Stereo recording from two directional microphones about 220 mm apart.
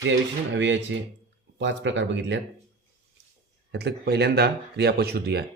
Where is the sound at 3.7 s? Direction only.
50° right (ahead or behind).